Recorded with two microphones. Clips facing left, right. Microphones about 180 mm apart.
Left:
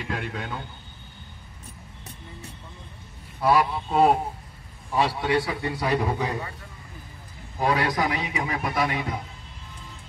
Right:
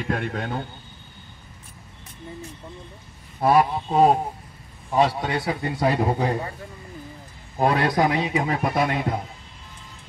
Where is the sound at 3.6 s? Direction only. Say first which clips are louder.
Right 3 dB; 30° right (ahead or behind).